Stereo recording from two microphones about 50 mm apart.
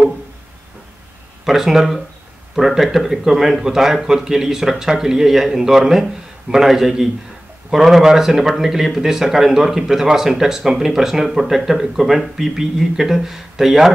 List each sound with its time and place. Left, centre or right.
1.4 s speech: centre